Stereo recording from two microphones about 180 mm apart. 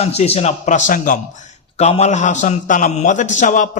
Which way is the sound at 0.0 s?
35° left (ahead or behind).